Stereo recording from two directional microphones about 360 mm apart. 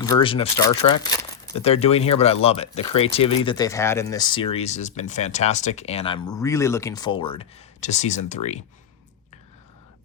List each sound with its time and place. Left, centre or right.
0.0 s speech: centre